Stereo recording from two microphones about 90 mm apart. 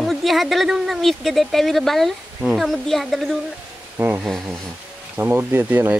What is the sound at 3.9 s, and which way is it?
Speech, 25° right (ahead or behind).